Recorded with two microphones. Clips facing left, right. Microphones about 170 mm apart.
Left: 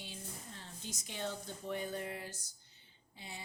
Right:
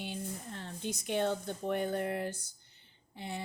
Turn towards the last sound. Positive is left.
turn(degrees=-60)  # may be behind; listen again after turning